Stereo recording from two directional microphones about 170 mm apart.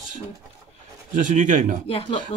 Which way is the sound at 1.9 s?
35° left (ahead or behind).